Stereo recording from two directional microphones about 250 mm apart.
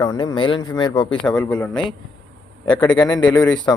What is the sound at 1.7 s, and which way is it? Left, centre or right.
Speech, centre.